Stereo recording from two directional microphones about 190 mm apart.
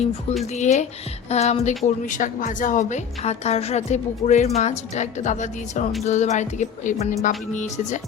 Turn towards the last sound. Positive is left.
turn(degrees=40)  # may be behind; listen again after turning